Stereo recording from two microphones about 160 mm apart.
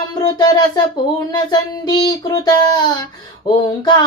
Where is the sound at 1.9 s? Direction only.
25° left (ahead or behind).